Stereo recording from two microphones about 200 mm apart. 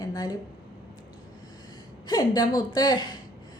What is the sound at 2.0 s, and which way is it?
A woman's voice, 20° left (ahead or behind).